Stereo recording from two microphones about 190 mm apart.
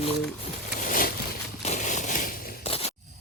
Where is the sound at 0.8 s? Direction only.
45° left (ahead or behind).